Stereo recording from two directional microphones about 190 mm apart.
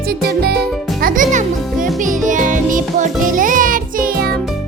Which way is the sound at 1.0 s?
45° right (ahead or behind).